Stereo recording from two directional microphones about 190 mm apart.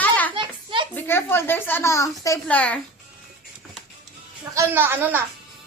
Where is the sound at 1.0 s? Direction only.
10° left (ahead or behind).